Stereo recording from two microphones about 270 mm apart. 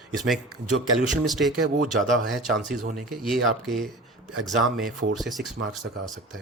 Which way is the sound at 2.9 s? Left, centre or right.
Centre.